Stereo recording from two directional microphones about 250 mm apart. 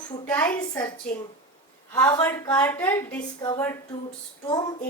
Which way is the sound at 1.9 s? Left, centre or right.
Centre.